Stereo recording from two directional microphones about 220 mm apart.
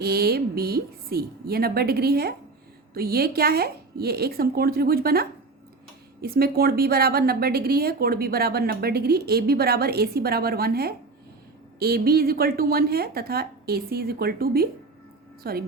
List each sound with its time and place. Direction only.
0.0 s a woman's voice: 45° right (ahead or behind)